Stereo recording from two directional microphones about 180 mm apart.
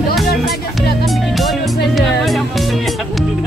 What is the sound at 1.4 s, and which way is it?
Music, centre (ahead or behind).